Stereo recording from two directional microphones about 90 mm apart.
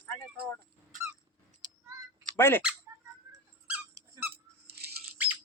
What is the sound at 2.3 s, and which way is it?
Speech, 25° left (ahead or behind).